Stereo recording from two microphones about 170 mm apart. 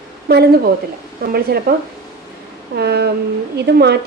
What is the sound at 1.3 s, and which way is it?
Speech, 65° right (ahead or behind).